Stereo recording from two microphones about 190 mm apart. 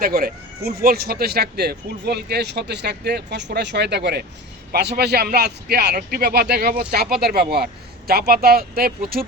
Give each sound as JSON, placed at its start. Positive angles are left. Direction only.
{"t": 0.0, "sound": "speech", "side_deg": -55}